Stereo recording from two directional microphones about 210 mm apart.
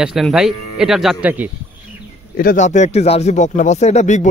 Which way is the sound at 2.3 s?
40° left (ahead or behind).